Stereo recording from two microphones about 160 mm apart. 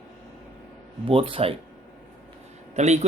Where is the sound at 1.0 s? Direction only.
35° right (ahead or behind).